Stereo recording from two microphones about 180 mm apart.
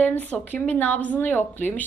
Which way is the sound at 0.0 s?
10° left (ahead or behind).